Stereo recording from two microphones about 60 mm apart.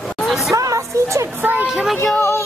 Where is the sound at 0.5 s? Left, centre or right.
Right.